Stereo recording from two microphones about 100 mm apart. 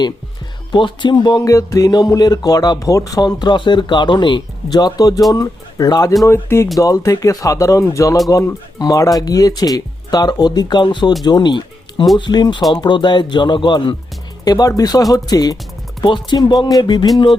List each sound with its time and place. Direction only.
0.7 s speech: 55° left (ahead or behind)
1.5 s speech: 35° left (ahead or behind)
6.2 s speech: 25° left (ahead or behind); by 13.9 s 50° left (ahead or behind)
14.4 s speech: 40° left (ahead or behind)